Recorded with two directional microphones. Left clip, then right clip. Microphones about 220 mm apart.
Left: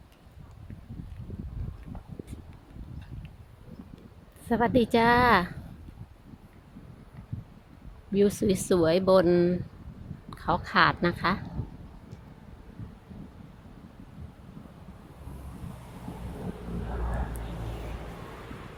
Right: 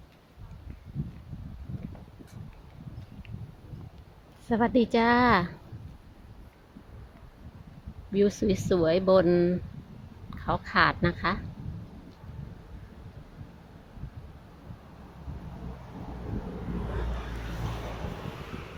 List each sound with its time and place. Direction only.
4.4 s speech: 10° left (ahead or behind)
8.1 s a woman's voice: 10° left (ahead or behind)
18.2 s vehicle: 45° right (ahead or behind)